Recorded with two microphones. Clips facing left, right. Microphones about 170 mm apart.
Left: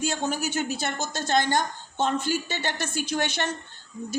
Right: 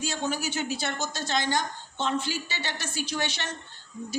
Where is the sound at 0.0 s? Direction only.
50° left (ahead or behind).